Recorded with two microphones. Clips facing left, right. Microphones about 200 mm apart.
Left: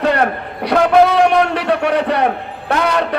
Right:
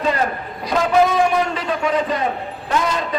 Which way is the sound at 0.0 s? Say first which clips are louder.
Left 5 dB; 65° left (ahead or behind).